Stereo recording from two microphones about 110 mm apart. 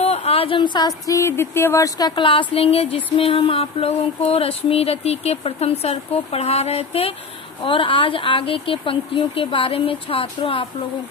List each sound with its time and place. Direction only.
0.0 s a sound: 70° left (ahead or behind)
0.6 s speech: 40° left (ahead or behind); by 7.1 s 65° left (ahead or behind)
7.6 s speech: 50° left (ahead or behind)